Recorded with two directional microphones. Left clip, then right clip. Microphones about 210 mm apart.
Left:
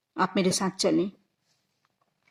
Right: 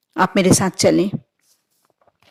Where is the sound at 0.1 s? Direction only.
40° right (ahead or behind).